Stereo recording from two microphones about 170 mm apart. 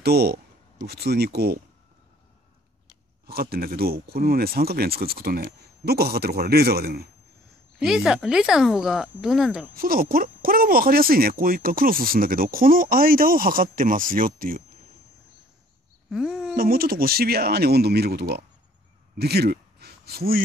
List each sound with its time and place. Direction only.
0.0 s speech: 70° right (ahead or behind)
3.3 s speech: 65° right (ahead or behind)
7.8 s speech: 5° right (ahead or behind)
9.8 s speech: 55° right (ahead or behind)
16.1 s a sound: 5° right (ahead or behind)
16.5 s speech: 60° right (ahead or behind)
19.1 s a sound: 70° right (ahead or behind)